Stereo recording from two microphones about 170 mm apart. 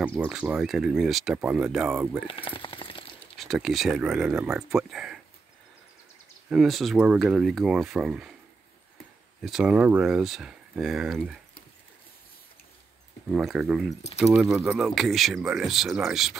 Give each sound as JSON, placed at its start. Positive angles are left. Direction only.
{"t": 0.0, "sound": "speech", "side_deg": -10}
{"t": 2.2, "sound": "speech", "side_deg": 30}
{"t": 3.3, "sound": "speech", "side_deg": 0}
{"t": 6.5, "sound": "speech", "side_deg": 0}
{"t": 9.4, "sound": "speech", "side_deg": -5}
{"t": 13.3, "sound": "speech", "side_deg": 0}